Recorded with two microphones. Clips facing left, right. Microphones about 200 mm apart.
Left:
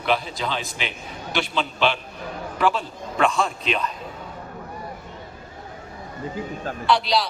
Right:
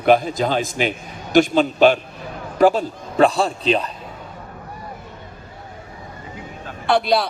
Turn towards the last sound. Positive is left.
turn(degrees=-55)  # may be behind; listen again after turning